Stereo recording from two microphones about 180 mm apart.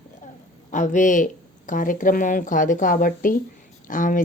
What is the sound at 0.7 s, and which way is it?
Speech, 45° left (ahead or behind).